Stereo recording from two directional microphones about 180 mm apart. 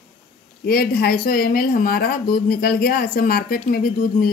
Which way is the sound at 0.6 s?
60° left (ahead or behind).